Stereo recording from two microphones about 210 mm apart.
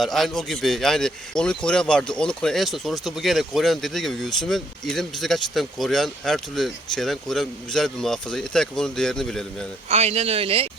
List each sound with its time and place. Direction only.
0.0 s speech: centre (ahead or behind)
9.9 s speech: 30° right (ahead or behind)